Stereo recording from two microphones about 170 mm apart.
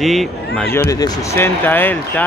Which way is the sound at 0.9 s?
20° left (ahead or behind).